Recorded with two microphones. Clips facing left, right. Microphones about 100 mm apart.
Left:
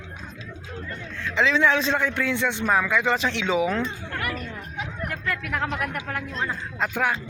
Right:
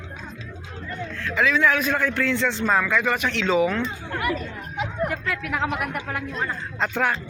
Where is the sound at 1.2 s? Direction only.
25° left (ahead or behind).